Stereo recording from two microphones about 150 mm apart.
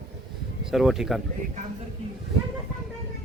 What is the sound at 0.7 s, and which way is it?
Speech, centre (ahead or behind).